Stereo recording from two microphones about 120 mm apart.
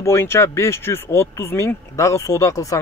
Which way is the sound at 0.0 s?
20° left (ahead or behind).